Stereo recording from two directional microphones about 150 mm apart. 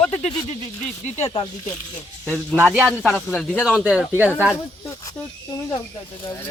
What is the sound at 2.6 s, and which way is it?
Speech, 5° right (ahead or behind).